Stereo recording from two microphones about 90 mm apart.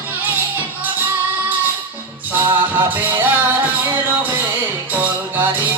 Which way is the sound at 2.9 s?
20° right (ahead or behind).